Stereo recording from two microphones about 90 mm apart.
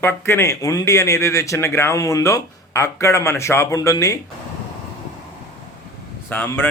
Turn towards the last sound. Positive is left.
turn(degrees=20)  # may be behind; listen again after turning